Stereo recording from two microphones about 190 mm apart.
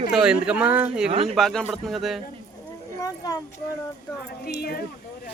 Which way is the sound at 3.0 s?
20° left (ahead or behind).